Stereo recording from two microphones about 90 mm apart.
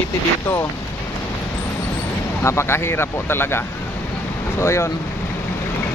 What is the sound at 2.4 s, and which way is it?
Speech, 30° left (ahead or behind).